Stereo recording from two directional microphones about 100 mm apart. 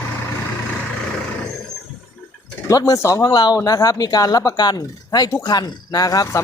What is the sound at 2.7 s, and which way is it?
Speech, 35° left (ahead or behind).